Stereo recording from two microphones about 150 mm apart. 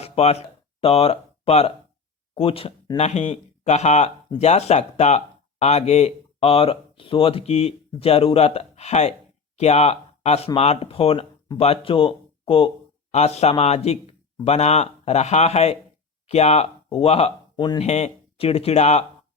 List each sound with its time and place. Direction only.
0.0 s speech: 45° left (ahead or behind)